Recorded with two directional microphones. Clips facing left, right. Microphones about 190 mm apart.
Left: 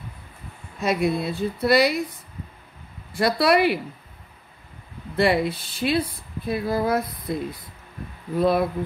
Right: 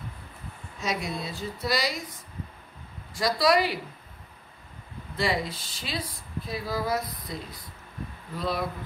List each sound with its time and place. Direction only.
0.7 s speech: 60° left (ahead or behind)
5.1 s speech: 60° left (ahead or behind)
8.4 s speech: 55° left (ahead or behind)